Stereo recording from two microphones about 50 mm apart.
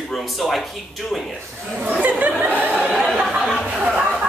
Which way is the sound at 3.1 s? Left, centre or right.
Centre.